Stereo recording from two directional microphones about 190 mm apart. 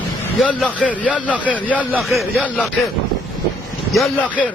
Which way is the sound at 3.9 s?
Centre (ahead or behind).